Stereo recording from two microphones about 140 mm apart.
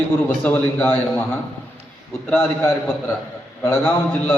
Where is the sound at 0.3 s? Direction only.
15° left (ahead or behind).